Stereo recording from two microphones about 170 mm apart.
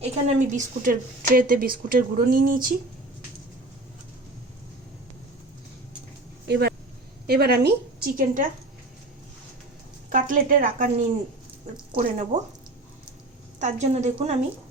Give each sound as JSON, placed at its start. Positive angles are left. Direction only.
{"t": 0.0, "sound": "speech", "side_deg": -40}
{"t": 6.5, "sound": "speech", "side_deg": -75}
{"t": 10.1, "sound": "a woman's voice", "side_deg": -50}
{"t": 13.6, "sound": "a woman's voice", "side_deg": -40}